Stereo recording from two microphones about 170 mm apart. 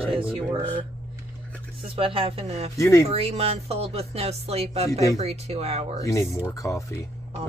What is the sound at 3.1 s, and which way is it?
Speech, 35° right (ahead or behind).